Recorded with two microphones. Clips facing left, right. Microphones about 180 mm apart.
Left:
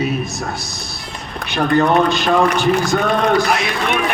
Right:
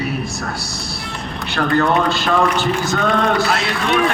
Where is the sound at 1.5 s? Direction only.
15° left (ahead or behind).